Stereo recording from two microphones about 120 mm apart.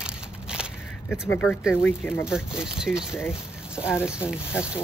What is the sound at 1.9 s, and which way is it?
Speech, 20° left (ahead or behind).